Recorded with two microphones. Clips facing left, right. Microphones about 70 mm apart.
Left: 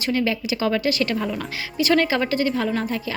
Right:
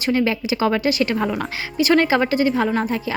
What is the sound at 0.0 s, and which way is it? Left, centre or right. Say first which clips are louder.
Speech: right 3 dB; right.